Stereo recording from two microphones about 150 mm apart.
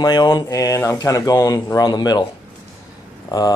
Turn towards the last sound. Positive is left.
turn(degrees=25)  # may be behind; listen again after turning